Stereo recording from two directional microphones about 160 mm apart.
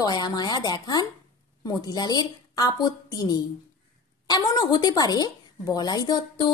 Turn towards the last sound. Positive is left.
turn(degrees=25)  # may be behind; listen again after turning